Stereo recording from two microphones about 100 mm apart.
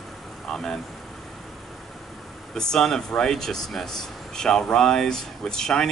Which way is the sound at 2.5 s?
5° left (ahead or behind).